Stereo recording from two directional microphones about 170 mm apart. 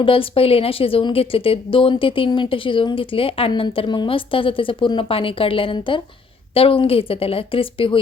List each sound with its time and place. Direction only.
0.0 s a woman's voice: 30° left (ahead or behind)